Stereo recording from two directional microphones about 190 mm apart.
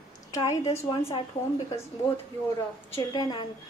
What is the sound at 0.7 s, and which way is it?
Speech, 30° left (ahead or behind).